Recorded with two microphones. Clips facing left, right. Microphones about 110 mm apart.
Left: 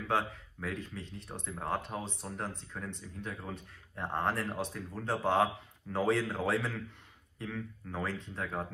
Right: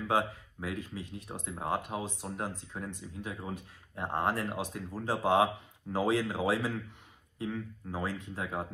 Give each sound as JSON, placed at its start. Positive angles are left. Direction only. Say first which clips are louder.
{"t": 0.1, "sound": "speech", "louder": "right 2 dB", "side_deg": -15}